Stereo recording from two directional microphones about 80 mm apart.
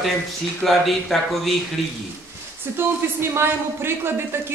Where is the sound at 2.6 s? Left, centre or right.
Right.